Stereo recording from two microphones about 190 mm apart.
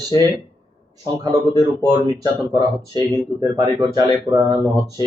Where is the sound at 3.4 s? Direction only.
20° right (ahead or behind).